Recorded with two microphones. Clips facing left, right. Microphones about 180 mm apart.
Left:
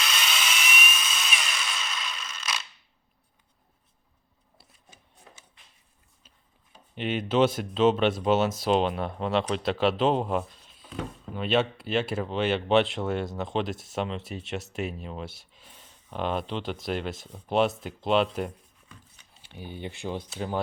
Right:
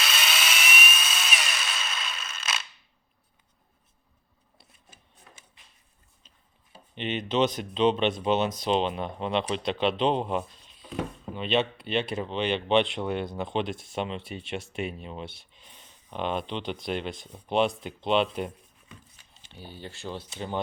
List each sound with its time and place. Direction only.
0.0 s tools: 5° right (ahead or behind)
6.9 s speech: 5° left (ahead or behind)
19.3 s a sound: 10° left (ahead or behind)
19.8 s speech: 15° left (ahead or behind)